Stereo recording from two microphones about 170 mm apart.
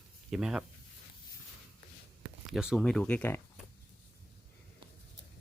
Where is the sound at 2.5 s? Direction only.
Centre (ahead or behind).